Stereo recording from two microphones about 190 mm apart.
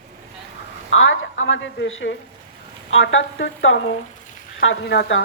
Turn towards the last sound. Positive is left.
turn(degrees=60)  # may be behind; listen again after turning